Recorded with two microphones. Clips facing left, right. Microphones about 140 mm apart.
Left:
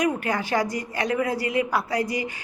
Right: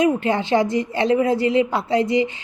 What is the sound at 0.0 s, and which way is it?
A woman's voice, 25° right (ahead or behind).